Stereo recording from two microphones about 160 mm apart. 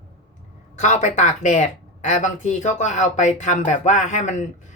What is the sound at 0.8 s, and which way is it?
Speech, 50° left (ahead or behind).